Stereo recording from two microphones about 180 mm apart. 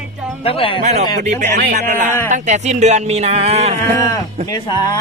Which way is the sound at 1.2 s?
45° right (ahead or behind).